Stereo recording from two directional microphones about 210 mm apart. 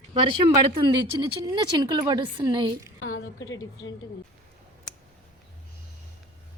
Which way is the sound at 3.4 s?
15° left (ahead or behind).